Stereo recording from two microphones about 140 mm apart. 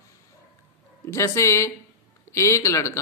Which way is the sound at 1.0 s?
20° left (ahead or behind).